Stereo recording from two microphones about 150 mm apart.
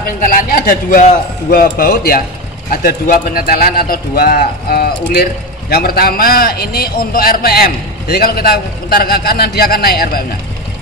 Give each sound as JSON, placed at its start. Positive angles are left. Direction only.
{"t": 0.2, "sound": "speech", "side_deg": 70}
{"t": 1.5, "sound": "speech", "side_deg": 80}